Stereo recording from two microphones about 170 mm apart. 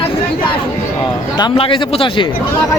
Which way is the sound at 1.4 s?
30° left (ahead or behind).